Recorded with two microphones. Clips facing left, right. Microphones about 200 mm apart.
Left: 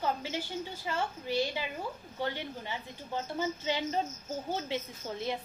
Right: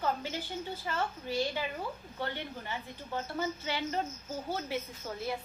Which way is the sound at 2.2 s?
15° left (ahead or behind).